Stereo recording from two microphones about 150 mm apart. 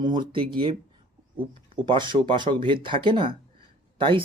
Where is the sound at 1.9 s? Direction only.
30° right (ahead or behind).